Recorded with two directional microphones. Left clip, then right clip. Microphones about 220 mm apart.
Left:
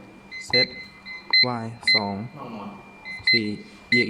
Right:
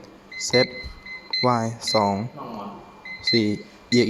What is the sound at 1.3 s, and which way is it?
Speech, 15° right (ahead or behind).